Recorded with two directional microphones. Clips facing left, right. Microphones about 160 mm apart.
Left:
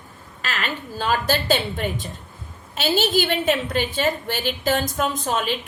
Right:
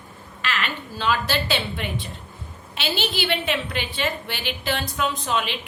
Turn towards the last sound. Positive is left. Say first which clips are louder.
# left 2 dB
turn(degrees=45)  # may be behind; listen again after turning